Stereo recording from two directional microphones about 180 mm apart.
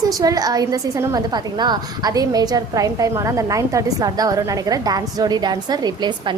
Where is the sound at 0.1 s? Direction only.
20° right (ahead or behind).